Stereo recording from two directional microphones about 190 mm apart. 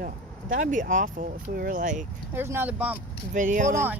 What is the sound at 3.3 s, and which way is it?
Speech, 40° right (ahead or behind).